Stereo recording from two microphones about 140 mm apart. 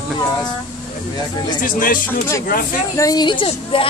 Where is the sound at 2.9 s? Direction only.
25° left (ahead or behind).